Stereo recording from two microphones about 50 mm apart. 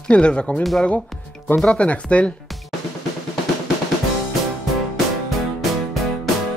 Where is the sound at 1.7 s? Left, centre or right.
Left.